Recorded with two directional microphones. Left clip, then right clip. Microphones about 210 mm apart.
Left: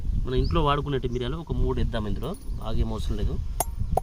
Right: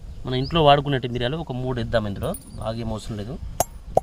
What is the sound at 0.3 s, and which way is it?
Speech, 45° right (ahead or behind).